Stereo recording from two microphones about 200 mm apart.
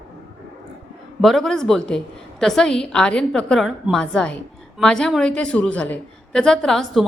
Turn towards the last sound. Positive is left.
turn(degrees=0)  # may be behind; listen again after turning